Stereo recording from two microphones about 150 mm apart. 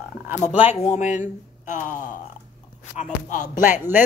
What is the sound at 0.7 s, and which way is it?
Speech, 50° left (ahead or behind).